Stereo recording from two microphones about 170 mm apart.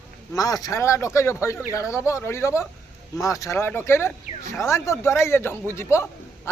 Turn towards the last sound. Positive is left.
turn(degrees=15)  # may be behind; listen again after turning